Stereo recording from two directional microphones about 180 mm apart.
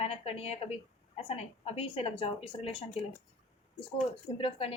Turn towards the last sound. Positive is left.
turn(degrees=30)  # may be behind; listen again after turning